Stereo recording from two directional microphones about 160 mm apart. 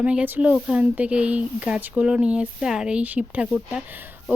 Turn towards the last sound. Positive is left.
turn(degrees=-10)  # may be behind; listen again after turning